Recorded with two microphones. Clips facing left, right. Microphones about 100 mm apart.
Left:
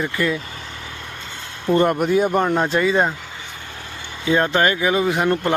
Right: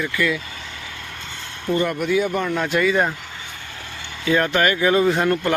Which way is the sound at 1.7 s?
45° left (ahead or behind).